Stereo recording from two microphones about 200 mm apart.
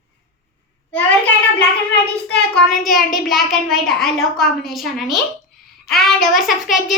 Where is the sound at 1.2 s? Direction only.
5° left (ahead or behind).